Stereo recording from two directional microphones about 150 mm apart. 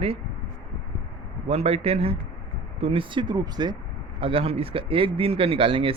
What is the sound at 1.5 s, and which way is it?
Speech, 45° right (ahead or behind).